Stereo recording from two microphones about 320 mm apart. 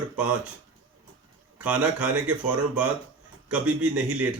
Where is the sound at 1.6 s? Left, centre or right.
Centre.